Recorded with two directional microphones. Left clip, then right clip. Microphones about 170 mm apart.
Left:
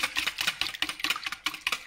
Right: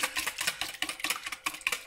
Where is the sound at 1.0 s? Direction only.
5° left (ahead or behind).